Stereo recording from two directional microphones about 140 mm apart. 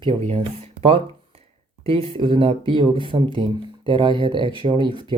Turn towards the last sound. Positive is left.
turn(degrees=-35)  # may be behind; listen again after turning